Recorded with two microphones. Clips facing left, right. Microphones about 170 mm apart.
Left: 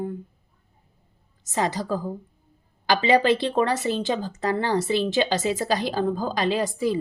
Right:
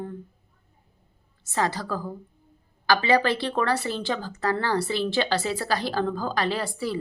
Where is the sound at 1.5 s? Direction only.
20° left (ahead or behind).